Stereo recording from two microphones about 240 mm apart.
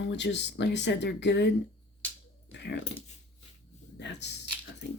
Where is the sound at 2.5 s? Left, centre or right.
Left.